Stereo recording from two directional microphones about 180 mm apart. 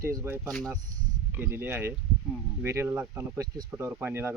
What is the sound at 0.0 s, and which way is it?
Speech, 15° right (ahead or behind).